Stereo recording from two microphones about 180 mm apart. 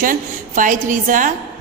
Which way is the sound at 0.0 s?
50° right (ahead or behind).